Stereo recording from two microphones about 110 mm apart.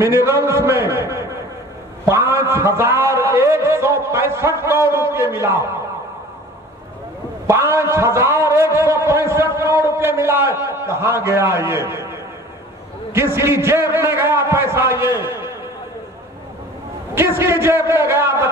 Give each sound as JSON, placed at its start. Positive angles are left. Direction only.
{"t": 0.0, "sound": "a man's voice", "side_deg": -25}
{"t": 7.4, "sound": "a man's voice", "side_deg": -25}
{"t": 17.1, "sound": "a man's voice", "side_deg": -25}